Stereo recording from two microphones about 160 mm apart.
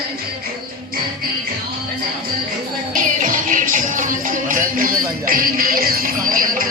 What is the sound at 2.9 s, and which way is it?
Music, 55° right (ahead or behind).